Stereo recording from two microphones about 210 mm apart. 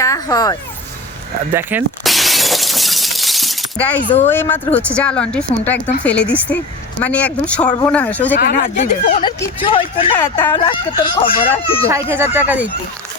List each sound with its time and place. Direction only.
0.0 s speech: 15° left (ahead or behind)
1.5 s shatter: 5° right (ahead or behind)
4.3 s speech: 10° left (ahead or behind)
8.4 s speech: 50° left (ahead or behind)
9.2 s speech: 25° left (ahead or behind)
10.2 s speech: 10° left (ahead or behind)
10.5 s speech: 25° left (ahead or behind)
11.9 s speech: 15° right (ahead or behind)